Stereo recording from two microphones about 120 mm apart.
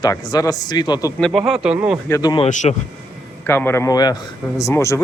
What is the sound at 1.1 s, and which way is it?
Speech, 5° left (ahead or behind).